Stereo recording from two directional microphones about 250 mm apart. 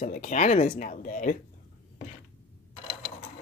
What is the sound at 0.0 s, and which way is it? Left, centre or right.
Speech, left.